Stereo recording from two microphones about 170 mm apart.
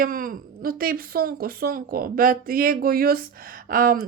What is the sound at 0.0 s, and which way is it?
Speech, 55° right (ahead or behind).